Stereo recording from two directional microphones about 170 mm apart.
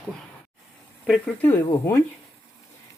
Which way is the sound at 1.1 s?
5° left (ahead or behind).